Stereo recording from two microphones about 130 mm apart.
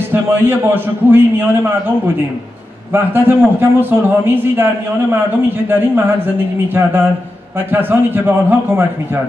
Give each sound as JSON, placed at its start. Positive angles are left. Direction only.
{"t": 0.1, "sound": "a man's voice", "side_deg": -15}
{"t": 2.9, "sound": "a man's voice", "side_deg": -15}
{"t": 5.7, "sound": "a man's voice", "side_deg": -15}